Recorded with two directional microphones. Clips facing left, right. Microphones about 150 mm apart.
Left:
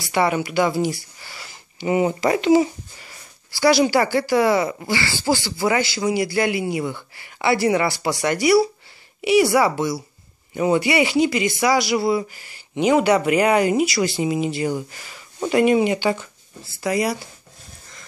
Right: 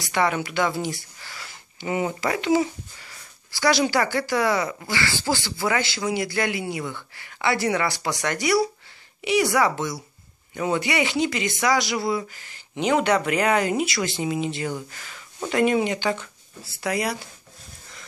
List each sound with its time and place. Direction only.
0.0 s speech: 10° left (ahead or behind)
1.2 s a sound: 10° left (ahead or behind)
2.2 s speech: 30° left (ahead or behind)
3.5 s speech: 5° left (ahead or behind); by 4.8 s 25° left (ahead or behind)
4.8 s speech: 10° left (ahead or behind)